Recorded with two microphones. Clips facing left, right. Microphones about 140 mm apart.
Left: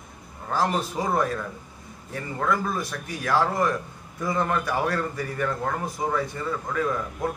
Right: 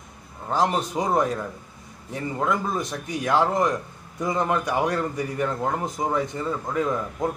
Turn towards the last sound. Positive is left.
turn(degrees=-20)  # may be behind; listen again after turning